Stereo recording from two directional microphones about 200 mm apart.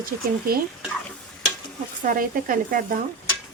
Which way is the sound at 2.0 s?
45° right (ahead or behind).